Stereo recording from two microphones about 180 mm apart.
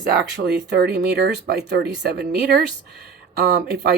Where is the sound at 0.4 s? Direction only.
65° right (ahead or behind).